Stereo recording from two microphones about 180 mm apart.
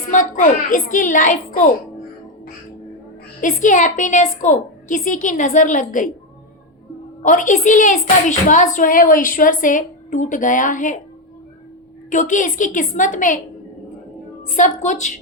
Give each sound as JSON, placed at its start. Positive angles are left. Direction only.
{"t": 0.1, "sound": "speech", "side_deg": 45}
{"t": 3.4, "sound": "speech", "side_deg": 45}
{"t": 7.2, "sound": "speech", "side_deg": 45}
{"t": 12.1, "sound": "speech", "side_deg": 45}
{"t": 14.5, "sound": "speech", "side_deg": 45}